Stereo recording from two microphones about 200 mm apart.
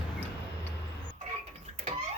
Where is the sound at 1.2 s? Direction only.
30° right (ahead or behind).